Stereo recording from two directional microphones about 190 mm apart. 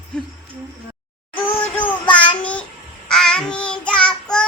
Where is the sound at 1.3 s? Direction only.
10° left (ahead or behind).